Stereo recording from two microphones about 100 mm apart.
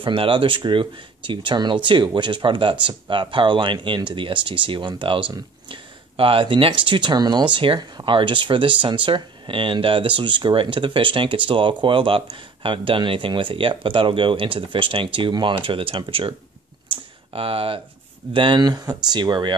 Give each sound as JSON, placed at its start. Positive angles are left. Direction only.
{"t": 0.0, "sound": "speech", "side_deg": -60}
{"t": 16.9, "sound": "a sound", "side_deg": -65}
{"t": 18.3, "sound": "speech", "side_deg": -60}
{"t": 18.6, "sound": "speech", "side_deg": -40}